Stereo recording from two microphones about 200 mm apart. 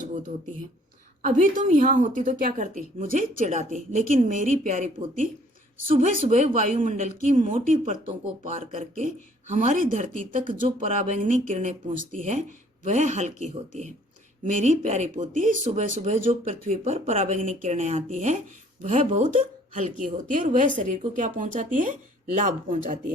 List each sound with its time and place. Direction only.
1.2 s speech: 40° right (ahead or behind)
5.9 s speech: 45° right (ahead or behind)